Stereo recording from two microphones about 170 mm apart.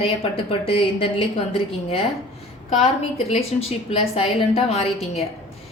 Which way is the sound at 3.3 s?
35° left (ahead or behind).